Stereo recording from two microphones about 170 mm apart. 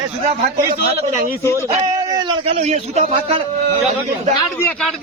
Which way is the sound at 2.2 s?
40° right (ahead or behind).